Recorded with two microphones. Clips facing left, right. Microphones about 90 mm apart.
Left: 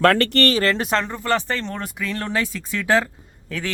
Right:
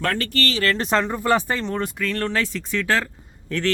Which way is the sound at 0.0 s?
75° left (ahead or behind).